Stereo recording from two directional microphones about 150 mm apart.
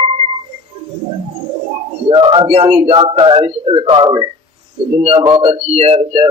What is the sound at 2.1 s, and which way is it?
Speech, 35° right (ahead or behind).